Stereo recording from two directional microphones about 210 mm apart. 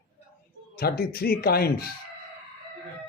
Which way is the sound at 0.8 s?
45° left (ahead or behind).